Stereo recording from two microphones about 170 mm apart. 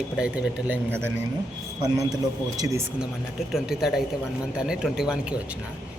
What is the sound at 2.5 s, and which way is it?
Speech, 20° right (ahead or behind).